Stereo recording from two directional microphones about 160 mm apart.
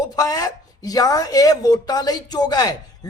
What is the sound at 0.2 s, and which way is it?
A woman's voice, 25° left (ahead or behind).